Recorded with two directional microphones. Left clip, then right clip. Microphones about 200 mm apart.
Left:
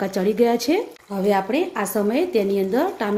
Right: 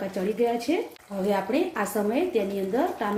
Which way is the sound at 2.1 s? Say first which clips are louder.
Left 5 dB; 50° left (ahead or behind).